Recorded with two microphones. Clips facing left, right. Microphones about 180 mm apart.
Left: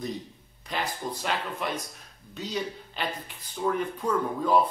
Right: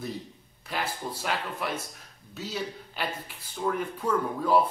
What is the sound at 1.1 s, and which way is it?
Speech, 10° right (ahead or behind).